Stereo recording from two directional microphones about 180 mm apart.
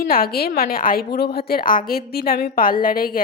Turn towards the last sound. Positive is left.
turn(degrees=55)  # may be behind; listen again after turning